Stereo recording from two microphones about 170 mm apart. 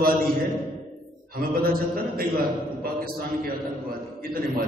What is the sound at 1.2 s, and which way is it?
A man's voice, 60° right (ahead or behind).